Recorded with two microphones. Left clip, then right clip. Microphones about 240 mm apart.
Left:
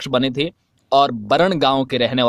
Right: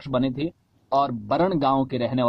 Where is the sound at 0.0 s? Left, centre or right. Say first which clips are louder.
Left 6 dB; left.